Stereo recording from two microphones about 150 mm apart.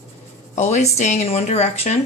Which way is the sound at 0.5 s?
50° left (ahead or behind).